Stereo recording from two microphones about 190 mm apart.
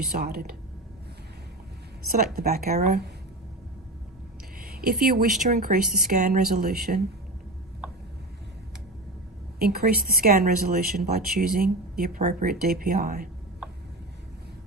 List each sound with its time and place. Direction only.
0.1 s speech: 55° right (ahead or behind)
2.1 s speech: 50° right (ahead or behind)
4.6 s speech: 55° right (ahead or behind)
9.6 s speech: 55° right (ahead or behind)